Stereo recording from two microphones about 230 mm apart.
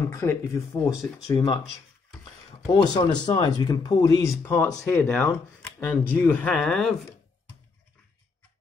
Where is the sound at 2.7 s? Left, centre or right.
Centre.